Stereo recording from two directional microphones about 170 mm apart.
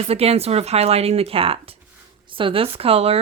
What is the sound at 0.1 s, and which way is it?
Speech, 35° right (ahead or behind).